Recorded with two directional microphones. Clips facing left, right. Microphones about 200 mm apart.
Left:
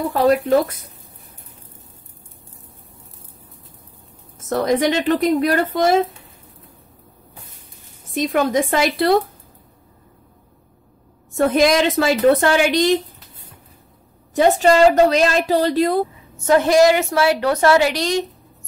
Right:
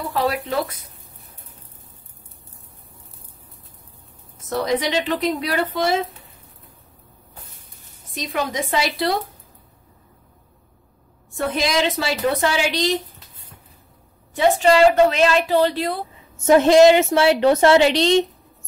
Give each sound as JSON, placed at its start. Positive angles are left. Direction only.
{"t": 0.1, "sound": "a woman's voice", "side_deg": 45}
{"t": 4.4, "sound": "a woman's voice", "side_deg": 50}
{"t": 8.1, "sound": "a woman's voice", "side_deg": 50}
{"t": 11.3, "sound": "a woman's voice", "side_deg": 50}
{"t": 14.3, "sound": "a woman's voice", "side_deg": 45}
{"t": 16.4, "sound": "a woman's voice", "side_deg": -25}